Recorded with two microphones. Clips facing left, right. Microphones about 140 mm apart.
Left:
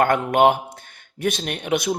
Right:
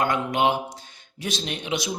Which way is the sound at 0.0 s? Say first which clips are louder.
Left 6 dB; 55° left (ahead or behind).